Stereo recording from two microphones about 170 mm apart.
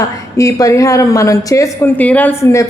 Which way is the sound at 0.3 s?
20° left (ahead or behind).